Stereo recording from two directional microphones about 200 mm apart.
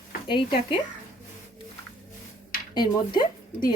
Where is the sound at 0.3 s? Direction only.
25° left (ahead or behind).